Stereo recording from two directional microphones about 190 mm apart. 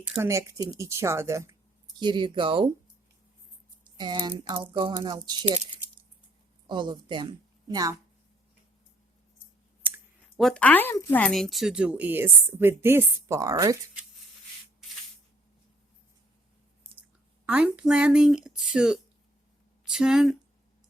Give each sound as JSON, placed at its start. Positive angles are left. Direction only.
{"t": 0.0, "sound": "a woman's voice", "side_deg": -10}
{"t": 3.9, "sound": "speech", "side_deg": -25}
{"t": 6.7, "sound": "a woman's voice", "side_deg": -25}
{"t": 9.9, "sound": "speech", "side_deg": 0}
{"t": 17.4, "sound": "speech", "side_deg": -5}